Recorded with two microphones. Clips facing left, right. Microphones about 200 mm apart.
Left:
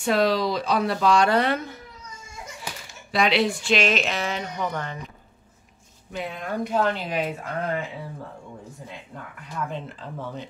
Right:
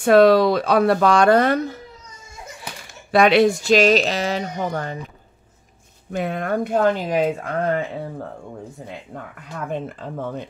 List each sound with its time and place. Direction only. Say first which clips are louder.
0.0 s speech: right 9 dB; 55° right (ahead or behind)
3.1 s speech: right 7 dB; 50° right (ahead or behind); by 4.9 s 35° right (ahead or behind)
6.1 s speech: right 7 dB; 55° right (ahead or behind)
9.1 s speech: left 3 dB; 60° right (ahead or behind)